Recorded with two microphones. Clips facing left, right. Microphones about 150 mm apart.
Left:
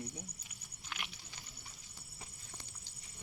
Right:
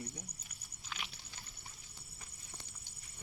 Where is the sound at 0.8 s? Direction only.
5° left (ahead or behind).